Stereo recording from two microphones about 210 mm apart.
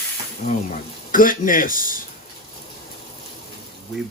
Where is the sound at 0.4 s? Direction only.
40° left (ahead or behind).